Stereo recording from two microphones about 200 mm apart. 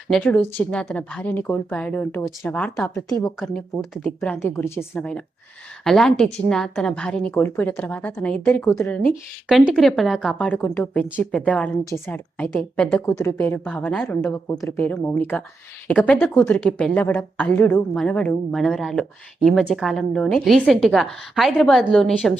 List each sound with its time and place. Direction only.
0.1 s a woman's voice: 5° left (ahead or behind)
3.1 s a woman's voice: 15° left (ahead or behind)
3.4 s a woman's voice: centre (ahead or behind)